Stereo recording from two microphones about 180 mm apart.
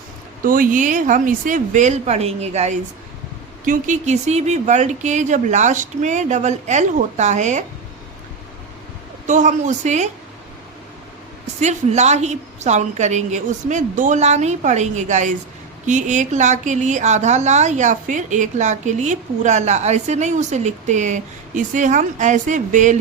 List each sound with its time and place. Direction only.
0.4 s a woman's voice: 50° right (ahead or behind)
9.2 s a woman's voice: 45° right (ahead or behind)
11.6 s a woman's voice: 40° right (ahead or behind)